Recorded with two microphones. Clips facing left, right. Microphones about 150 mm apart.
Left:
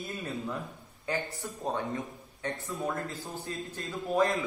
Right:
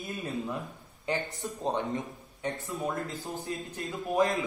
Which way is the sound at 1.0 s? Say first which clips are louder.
Right 1 dB; 20° right (ahead or behind).